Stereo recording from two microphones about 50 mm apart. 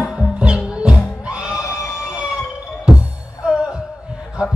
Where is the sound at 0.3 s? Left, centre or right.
Right.